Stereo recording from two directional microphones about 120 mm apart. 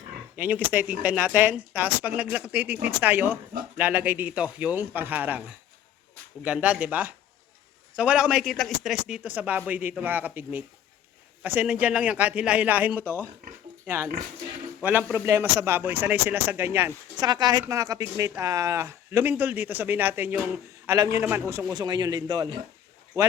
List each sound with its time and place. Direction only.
0.3 s speech: 15° right (ahead or behind)
17.2 s speech: 35° right (ahead or behind); by 20.9 s 15° right (ahead or behind)
20.9 s speech: 25° right (ahead or behind)
21.8 s a man's voice: 35° right (ahead or behind)